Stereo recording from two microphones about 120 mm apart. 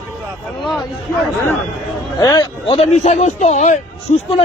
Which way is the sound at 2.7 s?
65° left (ahead or behind).